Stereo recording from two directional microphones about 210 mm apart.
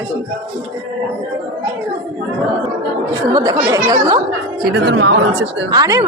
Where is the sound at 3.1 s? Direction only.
20° right (ahead or behind).